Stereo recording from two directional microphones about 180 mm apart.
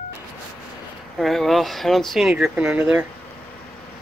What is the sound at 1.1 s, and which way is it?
Speech, centre (ahead or behind).